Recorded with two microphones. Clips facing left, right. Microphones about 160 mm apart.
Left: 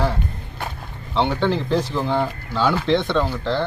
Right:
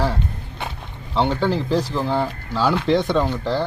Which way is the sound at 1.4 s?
5° right (ahead or behind).